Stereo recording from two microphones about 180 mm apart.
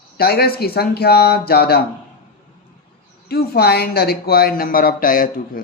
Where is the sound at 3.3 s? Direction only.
60° left (ahead or behind).